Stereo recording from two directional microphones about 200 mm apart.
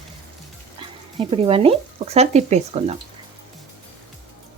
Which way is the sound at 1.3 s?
30° right (ahead or behind).